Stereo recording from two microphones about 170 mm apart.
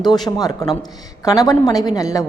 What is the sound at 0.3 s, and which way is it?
Speech, 20° left (ahead or behind).